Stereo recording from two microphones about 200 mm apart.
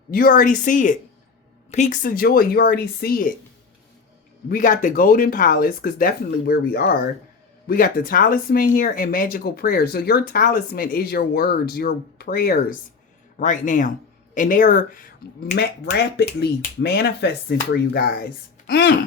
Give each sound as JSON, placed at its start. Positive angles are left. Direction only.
{"t": 0.1, "sound": "a woman's voice", "side_deg": 45}
{"t": 4.4, "sound": "a woman's voice", "side_deg": 40}